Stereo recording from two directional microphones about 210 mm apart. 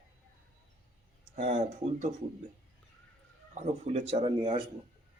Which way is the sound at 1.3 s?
35° right (ahead or behind).